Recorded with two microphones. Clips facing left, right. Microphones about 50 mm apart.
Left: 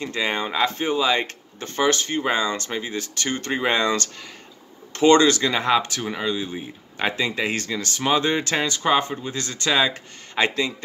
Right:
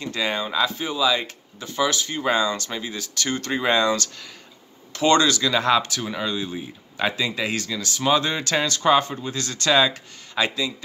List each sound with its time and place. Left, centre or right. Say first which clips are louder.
0.0 s speech: left 1 dB; left
2.2 s speech: right 3 dB; left
6.1 s speech: left 1 dB; left
10.3 s speech: left 2 dB; left